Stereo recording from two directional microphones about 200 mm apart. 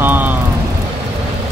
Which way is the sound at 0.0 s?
10° right (ahead or behind).